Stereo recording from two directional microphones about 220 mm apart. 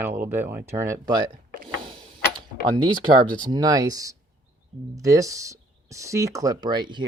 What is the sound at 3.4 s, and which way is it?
Speech, 15° right (ahead or behind).